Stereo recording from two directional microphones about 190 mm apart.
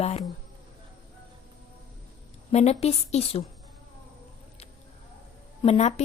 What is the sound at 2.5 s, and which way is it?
Speech, 35° left (ahead or behind).